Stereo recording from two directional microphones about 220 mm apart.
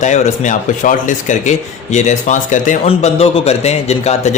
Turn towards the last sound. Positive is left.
turn(degrees=30)  # may be behind; listen again after turning